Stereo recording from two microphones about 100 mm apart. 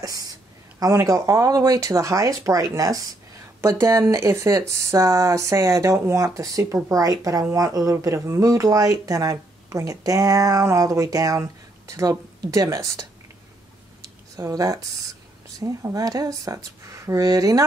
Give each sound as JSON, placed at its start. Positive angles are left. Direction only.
{"t": 0.0, "sound": "speech", "side_deg": -35}
{"t": 14.0, "sound": "a sound", "side_deg": -35}
{"t": 15.6, "sound": "speech", "side_deg": -35}